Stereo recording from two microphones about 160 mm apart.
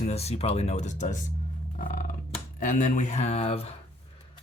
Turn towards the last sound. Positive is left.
turn(degrees=40)  # may be behind; listen again after turning